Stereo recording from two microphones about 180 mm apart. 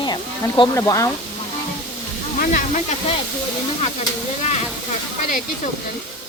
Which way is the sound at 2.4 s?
45° left (ahead or behind).